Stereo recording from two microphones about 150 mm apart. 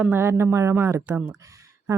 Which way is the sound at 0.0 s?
15° right (ahead or behind).